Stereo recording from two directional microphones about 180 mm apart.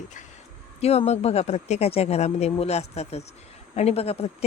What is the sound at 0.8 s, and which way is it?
Speech, 35° left (ahead or behind).